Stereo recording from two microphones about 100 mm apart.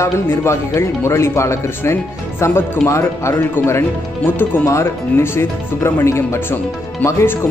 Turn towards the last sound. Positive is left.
turn(degrees=25)  # may be behind; listen again after turning